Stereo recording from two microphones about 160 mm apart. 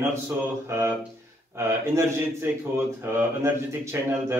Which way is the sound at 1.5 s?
15° right (ahead or behind).